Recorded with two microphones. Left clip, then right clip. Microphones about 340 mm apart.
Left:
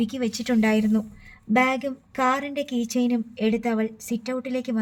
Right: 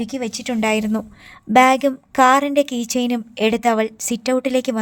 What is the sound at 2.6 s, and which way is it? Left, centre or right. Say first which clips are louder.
Speech: right 10 dB; right.